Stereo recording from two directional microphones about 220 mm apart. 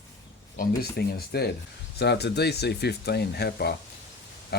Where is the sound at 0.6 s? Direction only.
45° left (ahead or behind).